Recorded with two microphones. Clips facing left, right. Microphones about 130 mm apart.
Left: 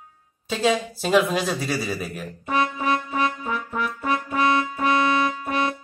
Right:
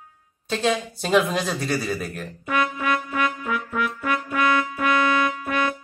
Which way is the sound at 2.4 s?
30° left (ahead or behind).